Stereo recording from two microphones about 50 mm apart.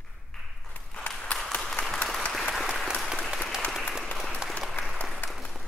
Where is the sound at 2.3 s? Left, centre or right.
Centre.